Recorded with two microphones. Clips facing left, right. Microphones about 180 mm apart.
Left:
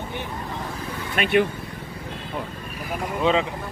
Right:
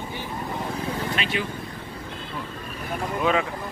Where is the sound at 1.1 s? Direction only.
55° left (ahead or behind).